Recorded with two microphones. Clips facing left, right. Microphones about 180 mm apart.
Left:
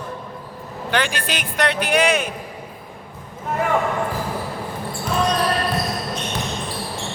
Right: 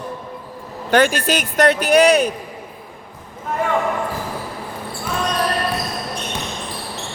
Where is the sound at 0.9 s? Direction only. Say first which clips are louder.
Right 7 dB; 45° right (ahead or behind).